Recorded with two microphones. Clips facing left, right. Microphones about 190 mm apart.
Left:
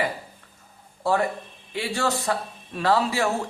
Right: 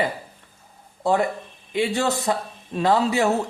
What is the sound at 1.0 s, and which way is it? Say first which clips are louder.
Speech: right 2 dB; 20° right (ahead or behind).